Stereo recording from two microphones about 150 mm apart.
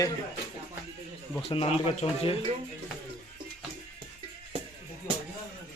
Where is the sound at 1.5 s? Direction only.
40° left (ahead or behind).